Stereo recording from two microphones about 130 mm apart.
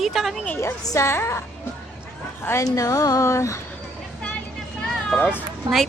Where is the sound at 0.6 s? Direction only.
20° left (ahead or behind).